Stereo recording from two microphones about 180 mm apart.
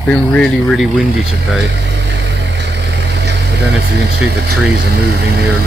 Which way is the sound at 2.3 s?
75° right (ahead or behind).